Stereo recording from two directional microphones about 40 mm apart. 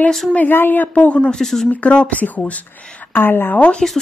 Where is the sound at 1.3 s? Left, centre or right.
Centre.